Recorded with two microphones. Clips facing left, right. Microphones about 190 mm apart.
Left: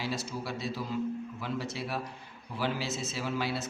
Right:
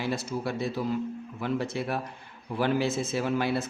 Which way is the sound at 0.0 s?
55° right (ahead or behind).